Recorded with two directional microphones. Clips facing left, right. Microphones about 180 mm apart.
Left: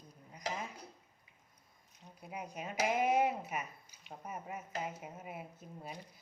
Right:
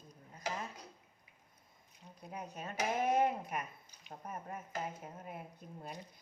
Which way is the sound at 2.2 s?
10° left (ahead or behind).